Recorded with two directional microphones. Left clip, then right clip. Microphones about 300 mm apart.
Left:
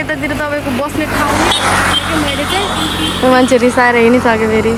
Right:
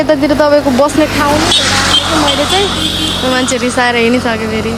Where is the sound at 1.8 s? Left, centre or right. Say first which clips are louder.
Right 3 dB; centre.